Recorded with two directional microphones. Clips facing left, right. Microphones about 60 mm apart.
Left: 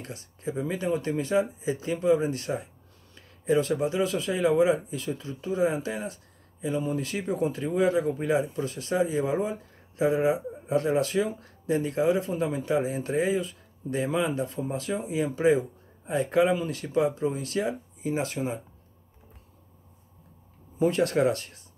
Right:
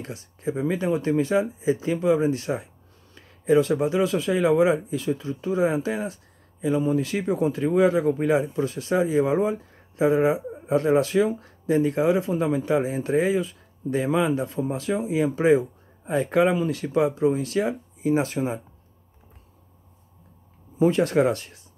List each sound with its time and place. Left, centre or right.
0.0 s speech: right
20.8 s speech: right